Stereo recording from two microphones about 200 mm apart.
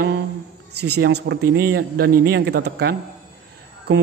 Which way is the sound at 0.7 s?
55° right (ahead or behind).